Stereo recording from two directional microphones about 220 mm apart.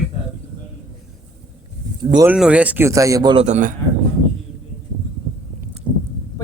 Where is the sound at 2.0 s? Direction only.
20° right (ahead or behind).